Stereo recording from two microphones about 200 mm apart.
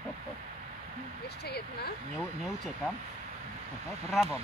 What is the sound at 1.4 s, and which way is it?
Speech, 55° left (ahead or behind).